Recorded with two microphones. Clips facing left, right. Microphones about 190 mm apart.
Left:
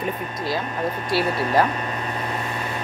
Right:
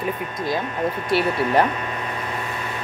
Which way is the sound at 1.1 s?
20° right (ahead or behind).